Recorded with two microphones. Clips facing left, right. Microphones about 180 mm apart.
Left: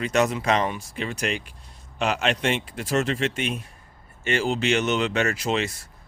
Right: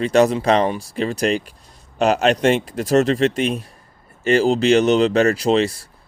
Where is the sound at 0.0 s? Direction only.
35° right (ahead or behind).